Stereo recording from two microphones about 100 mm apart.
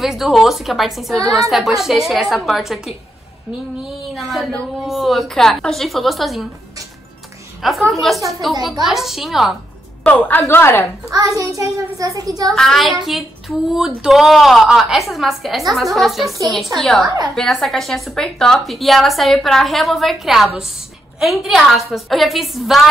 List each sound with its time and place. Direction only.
0.0 s speech: centre (ahead or behind)
7.6 s speech: centre (ahead or behind)
10.4 s a woman's voice: 25° left (ahead or behind)
11.1 s a child's voice: 35° right (ahead or behind)
12.5 s speech: 5° left (ahead or behind)